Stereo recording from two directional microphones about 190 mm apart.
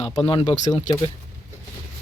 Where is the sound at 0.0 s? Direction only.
30° left (ahead or behind).